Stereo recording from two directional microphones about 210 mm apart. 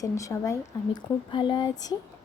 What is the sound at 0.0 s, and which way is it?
Speech, 15° left (ahead or behind).